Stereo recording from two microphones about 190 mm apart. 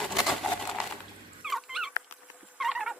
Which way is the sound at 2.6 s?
Centre (ahead or behind).